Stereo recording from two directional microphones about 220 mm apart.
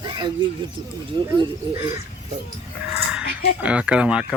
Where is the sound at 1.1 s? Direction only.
20° right (ahead or behind).